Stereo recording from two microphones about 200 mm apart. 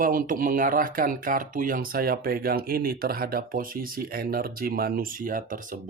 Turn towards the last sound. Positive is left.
turn(degrees=-40)  # may be behind; listen again after turning